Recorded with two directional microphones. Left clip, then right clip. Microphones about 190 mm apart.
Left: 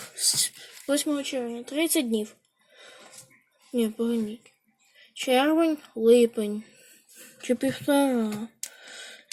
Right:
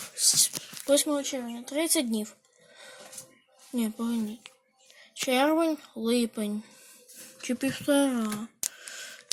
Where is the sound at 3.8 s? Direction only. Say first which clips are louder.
Left 6 dB; 25° right (ahead or behind).